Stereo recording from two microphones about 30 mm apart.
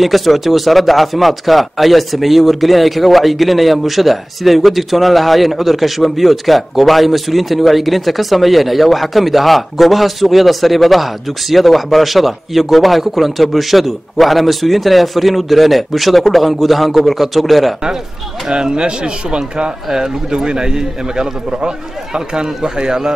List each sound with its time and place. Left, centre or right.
0.0 s speech: centre
18.5 s a man's voice: right